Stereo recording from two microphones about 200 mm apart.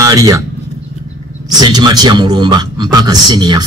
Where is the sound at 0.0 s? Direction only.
15° right (ahead or behind).